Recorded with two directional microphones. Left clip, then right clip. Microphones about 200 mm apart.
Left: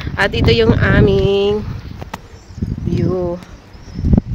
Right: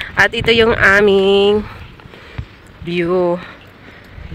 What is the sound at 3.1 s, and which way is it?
Speech, 25° right (ahead or behind).